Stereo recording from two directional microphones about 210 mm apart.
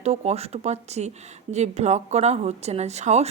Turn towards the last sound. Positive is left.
turn(degrees=-30)  # may be behind; listen again after turning